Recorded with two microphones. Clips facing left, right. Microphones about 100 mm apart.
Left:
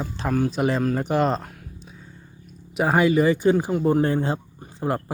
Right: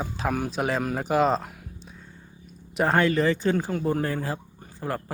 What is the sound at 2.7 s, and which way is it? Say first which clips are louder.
Speech: left 3 dB; 10° left (ahead or behind).